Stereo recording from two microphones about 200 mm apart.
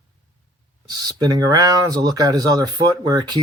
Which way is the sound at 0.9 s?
20° right (ahead or behind).